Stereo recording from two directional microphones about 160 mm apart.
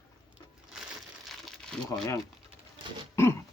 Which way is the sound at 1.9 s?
20° left (ahead or behind).